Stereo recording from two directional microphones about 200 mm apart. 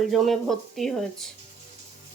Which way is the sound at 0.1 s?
Centre (ahead or behind).